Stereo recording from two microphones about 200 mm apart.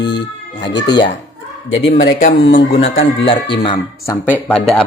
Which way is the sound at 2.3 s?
60° left (ahead or behind).